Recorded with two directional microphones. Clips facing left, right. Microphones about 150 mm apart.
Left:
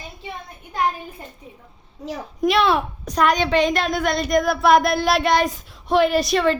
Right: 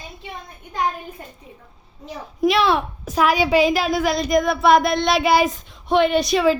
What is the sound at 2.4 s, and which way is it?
A child's voice, centre (ahead or behind).